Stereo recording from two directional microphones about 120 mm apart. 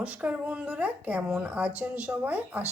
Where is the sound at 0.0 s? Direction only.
10° right (ahead or behind).